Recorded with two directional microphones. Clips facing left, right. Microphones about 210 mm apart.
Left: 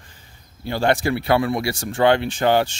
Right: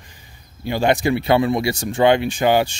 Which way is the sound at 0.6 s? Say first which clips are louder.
Right 2 dB; 15° right (ahead or behind).